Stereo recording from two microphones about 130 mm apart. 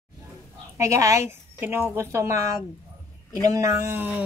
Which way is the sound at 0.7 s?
25° right (ahead or behind).